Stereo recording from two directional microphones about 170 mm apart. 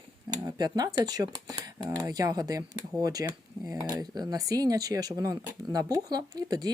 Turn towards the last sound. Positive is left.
turn(degrees=-25)  # may be behind; listen again after turning